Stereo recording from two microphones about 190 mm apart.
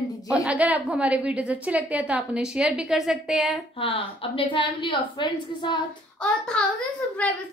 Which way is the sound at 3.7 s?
30° left (ahead or behind).